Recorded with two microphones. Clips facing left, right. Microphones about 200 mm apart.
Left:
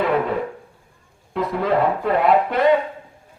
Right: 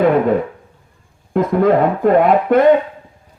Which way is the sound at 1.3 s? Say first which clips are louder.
Right 8 dB; 50° right (ahead or behind).